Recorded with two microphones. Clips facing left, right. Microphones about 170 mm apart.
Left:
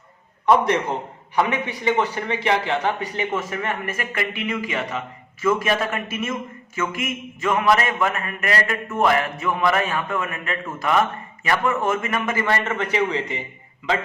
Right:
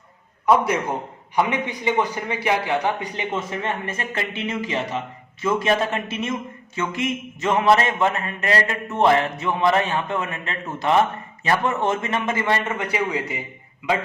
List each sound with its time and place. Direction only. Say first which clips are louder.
0.4 s a man's voice: left 1 dB; 5° right (ahead or behind)